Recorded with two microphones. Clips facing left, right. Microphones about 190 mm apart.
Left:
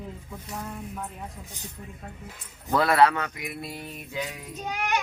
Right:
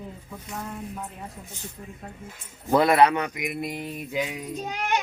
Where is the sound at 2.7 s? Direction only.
20° right (ahead or behind).